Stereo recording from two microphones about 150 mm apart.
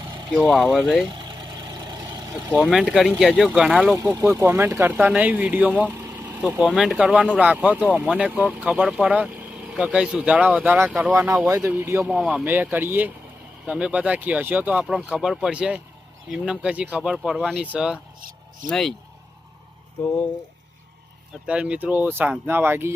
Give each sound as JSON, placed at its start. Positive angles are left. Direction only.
{"t": 0.0, "sound": "vehicle", "side_deg": -30}
{"t": 0.8, "sound": "speech", "side_deg": 10}
{"t": 1.1, "sound": "vehicle", "side_deg": -30}
{"t": 2.6, "sound": "speech", "side_deg": -5}
{"t": 3.9, "sound": "speech", "side_deg": -20}
{"t": 6.6, "sound": "speech", "side_deg": 0}
{"t": 18.2, "sound": "a sound", "side_deg": -70}
{"t": 18.7, "sound": "speech", "side_deg": 0}
{"t": 21.4, "sound": "speech", "side_deg": -5}